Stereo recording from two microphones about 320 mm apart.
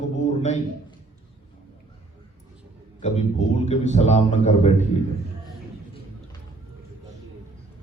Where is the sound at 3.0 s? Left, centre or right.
Left.